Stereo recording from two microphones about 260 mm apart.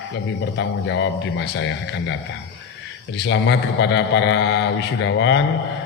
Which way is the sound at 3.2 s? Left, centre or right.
Left.